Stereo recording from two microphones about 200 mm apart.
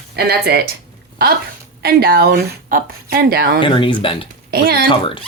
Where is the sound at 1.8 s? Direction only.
50° right (ahead or behind).